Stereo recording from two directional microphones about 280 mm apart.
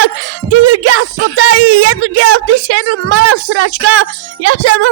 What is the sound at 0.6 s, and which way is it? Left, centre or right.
Speech, right.